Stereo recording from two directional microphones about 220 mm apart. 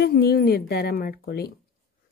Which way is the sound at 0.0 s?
45° left (ahead or behind).